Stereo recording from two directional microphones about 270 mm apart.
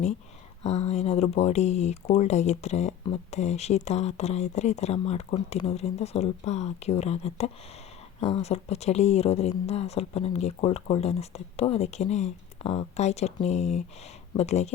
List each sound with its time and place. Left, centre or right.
0.6 s speech: left